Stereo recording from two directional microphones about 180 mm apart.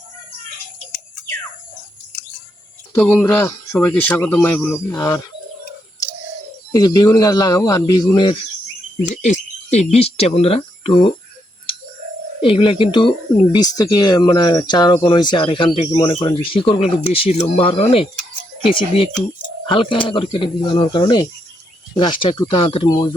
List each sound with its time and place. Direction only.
2.9 s speech: 10° left (ahead or behind)
6.7 s speech: 20° left (ahead or behind)
9.0 s speech: 40° left (ahead or behind)
12.4 s speech: 30° left (ahead or behind)